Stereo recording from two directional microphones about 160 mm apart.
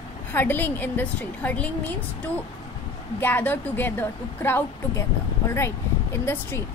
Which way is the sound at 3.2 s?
10° left (ahead or behind).